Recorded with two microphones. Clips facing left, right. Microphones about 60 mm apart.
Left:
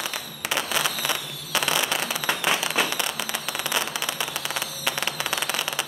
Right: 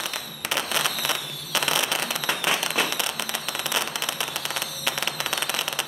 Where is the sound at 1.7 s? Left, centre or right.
Centre.